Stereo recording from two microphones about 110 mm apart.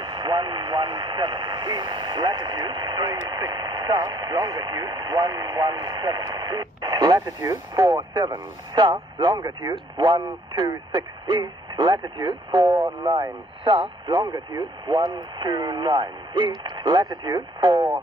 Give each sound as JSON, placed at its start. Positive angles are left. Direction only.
{"t": 0.0, "sound": "speech", "side_deg": -45}